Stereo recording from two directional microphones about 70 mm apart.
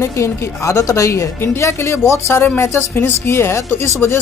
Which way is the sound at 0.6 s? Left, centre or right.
Left.